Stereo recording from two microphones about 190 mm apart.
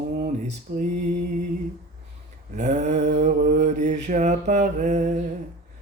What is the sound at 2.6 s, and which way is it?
Mantra, 40° right (ahead or behind).